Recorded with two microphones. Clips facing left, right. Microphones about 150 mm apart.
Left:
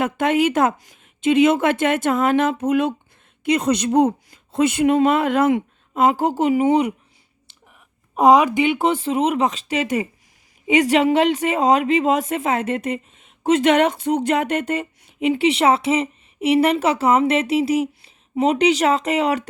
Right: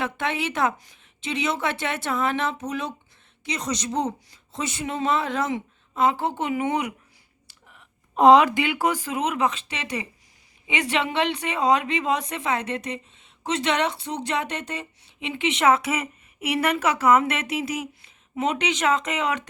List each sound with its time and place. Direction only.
0.0 s speech: 45° left (ahead or behind)
7.7 s speech: 10° left (ahead or behind); by 19.4 s 35° left (ahead or behind)